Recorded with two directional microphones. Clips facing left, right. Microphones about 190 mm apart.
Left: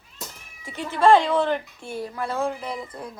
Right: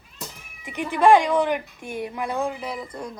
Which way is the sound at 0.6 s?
15° right (ahead or behind).